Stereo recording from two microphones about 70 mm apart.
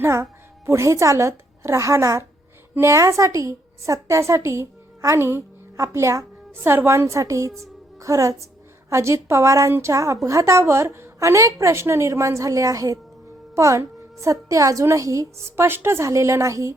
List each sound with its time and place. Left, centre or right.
0.0 s a woman's voice: right